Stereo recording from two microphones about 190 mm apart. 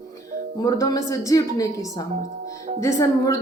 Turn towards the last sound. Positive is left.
turn(degrees=15)  # may be behind; listen again after turning